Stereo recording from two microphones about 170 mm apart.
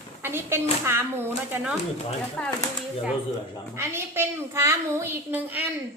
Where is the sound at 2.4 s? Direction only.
5° left (ahead or behind).